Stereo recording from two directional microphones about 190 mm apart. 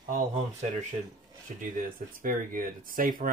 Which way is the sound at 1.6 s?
45° right (ahead or behind).